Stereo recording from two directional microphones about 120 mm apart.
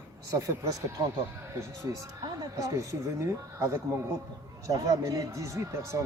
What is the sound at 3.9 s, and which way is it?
Speech, 20° right (ahead or behind).